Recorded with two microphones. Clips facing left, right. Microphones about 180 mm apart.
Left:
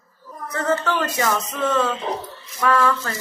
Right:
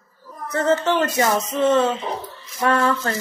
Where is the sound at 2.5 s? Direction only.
30° right (ahead or behind).